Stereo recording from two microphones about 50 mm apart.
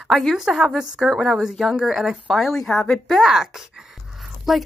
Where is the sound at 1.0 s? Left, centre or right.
Centre.